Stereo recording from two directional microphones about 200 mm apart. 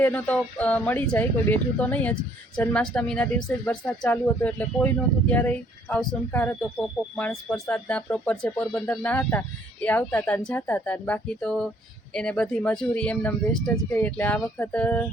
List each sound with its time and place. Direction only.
0.0 s speech: 10° left (ahead or behind)